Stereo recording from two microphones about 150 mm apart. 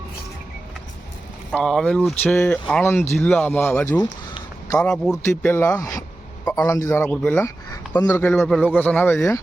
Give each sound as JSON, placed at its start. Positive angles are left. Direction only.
{"t": 1.5, "sound": "a man's voice", "side_deg": 5}
{"t": 5.5, "sound": "a man's voice", "side_deg": 15}